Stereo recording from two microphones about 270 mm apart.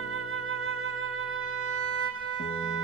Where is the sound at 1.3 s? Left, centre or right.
Right.